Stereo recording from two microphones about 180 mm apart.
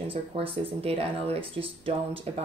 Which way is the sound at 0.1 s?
30° right (ahead or behind).